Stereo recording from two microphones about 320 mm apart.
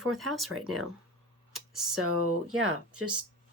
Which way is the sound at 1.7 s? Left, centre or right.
Centre.